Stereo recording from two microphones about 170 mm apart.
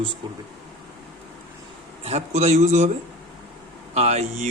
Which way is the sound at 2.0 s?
40° right (ahead or behind).